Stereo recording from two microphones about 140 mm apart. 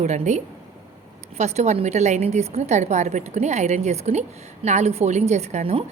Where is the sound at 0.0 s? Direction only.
55° right (ahead or behind).